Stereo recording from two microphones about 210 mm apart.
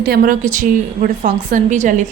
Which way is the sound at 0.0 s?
45° right (ahead or behind).